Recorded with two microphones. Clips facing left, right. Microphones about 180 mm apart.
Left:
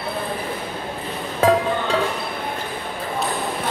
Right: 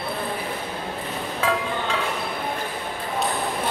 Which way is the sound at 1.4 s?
40° left (ahead or behind).